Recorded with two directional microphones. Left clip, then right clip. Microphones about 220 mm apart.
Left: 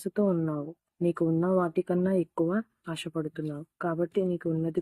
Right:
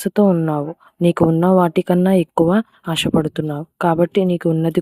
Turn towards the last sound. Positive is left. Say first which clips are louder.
# right 12 dB
turn(degrees=-45)  # may be behind; listen again after turning